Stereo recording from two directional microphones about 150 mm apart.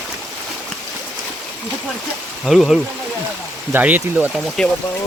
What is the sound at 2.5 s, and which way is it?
Speech, centre (ahead or behind).